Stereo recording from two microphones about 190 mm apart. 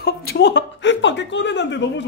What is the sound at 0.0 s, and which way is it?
Speech, 55° left (ahead or behind).